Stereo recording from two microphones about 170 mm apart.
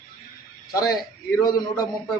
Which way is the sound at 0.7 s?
20° left (ahead or behind).